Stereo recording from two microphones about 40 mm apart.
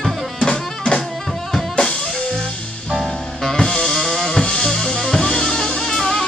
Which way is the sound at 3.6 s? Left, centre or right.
Centre.